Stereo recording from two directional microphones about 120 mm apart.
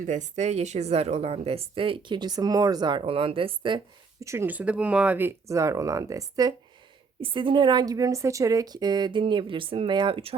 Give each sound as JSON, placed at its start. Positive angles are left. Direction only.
{"t": 0.0, "sound": "a woman's voice", "side_deg": -90}
{"t": 4.2, "sound": "speech", "side_deg": -25}
{"t": 7.2, "sound": "a woman's voice", "side_deg": -45}